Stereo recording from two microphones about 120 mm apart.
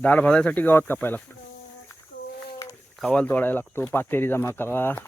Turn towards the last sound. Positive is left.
turn(degrees=20)  # may be behind; listen again after turning